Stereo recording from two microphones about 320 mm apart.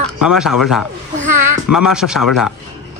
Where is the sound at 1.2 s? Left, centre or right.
Right.